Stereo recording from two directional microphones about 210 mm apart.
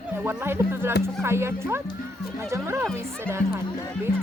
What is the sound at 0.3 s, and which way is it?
Speech, 10° right (ahead or behind).